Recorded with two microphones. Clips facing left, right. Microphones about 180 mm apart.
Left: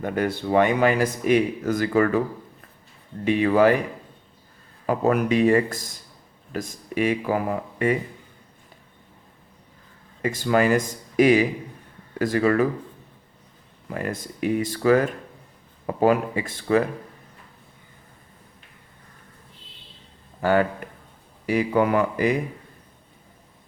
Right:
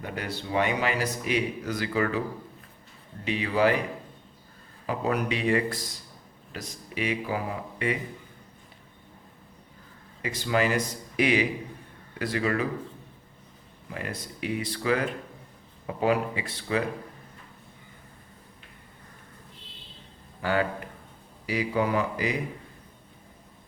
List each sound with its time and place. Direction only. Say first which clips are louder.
0.0 s speech: left 9 dB; 50° left (ahead or behind)
3.2 s speech: left 7 dB; 50° left (ahead or behind)
4.9 s speech: left 7 dB; 45° left (ahead or behind)
10.2 s speech: left 6 dB; 50° left (ahead or behind)
13.9 s speech: left 6 dB; 45° left (ahead or behind)
20.4 s speech: left 6 dB; 50° left (ahead or behind)